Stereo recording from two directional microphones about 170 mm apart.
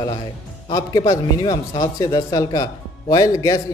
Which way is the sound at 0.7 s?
25° left (ahead or behind).